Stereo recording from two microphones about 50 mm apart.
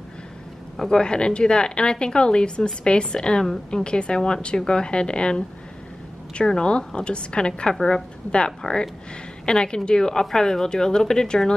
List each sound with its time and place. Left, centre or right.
0.7 s speech: centre